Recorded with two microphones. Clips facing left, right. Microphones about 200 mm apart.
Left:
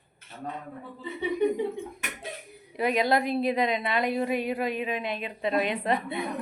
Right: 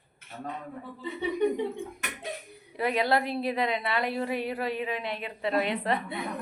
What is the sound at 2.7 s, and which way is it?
A woman's voice, 15° left (ahead or behind).